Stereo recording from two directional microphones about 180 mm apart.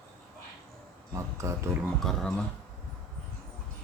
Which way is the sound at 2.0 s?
Centre (ahead or behind).